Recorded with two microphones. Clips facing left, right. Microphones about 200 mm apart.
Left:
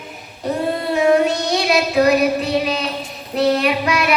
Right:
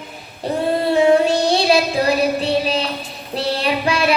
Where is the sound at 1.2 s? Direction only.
30° right (ahead or behind).